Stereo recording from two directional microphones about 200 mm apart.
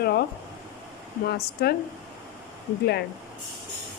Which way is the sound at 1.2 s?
50° left (ahead or behind).